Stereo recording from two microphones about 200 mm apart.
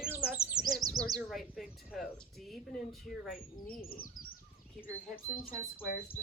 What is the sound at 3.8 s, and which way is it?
Speech, 45° left (ahead or behind).